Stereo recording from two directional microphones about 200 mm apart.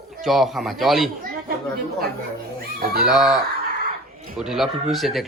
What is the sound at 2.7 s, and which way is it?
Fowl, 50° right (ahead or behind).